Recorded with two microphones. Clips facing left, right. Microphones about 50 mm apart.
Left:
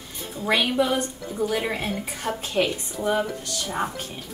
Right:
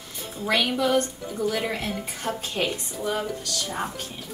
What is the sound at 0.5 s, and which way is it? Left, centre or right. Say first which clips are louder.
Speech: left 1 dB; left.